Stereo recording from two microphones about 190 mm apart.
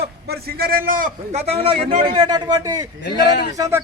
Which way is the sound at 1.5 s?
30° right (ahead or behind).